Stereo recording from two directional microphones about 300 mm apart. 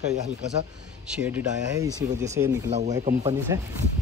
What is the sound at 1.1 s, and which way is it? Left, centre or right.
Speech, centre.